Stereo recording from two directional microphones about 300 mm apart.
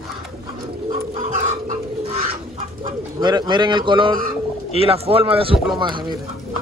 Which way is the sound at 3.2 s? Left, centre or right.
Centre.